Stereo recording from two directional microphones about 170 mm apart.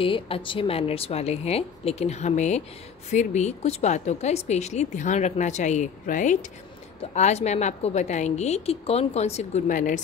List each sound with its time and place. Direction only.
0.0 s a woman's voice: 30° left (ahead or behind); by 9.9 s 50° left (ahead or behind)